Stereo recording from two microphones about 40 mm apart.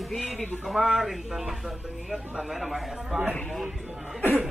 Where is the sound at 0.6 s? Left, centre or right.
Centre.